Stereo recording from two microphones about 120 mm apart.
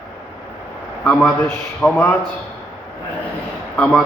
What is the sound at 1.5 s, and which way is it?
Speech, 15° left (ahead or behind).